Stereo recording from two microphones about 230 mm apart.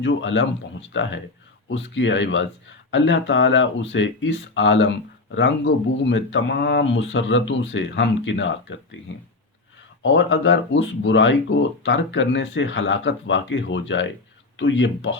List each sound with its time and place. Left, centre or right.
0.0 s speech: left
10.0 s speech: left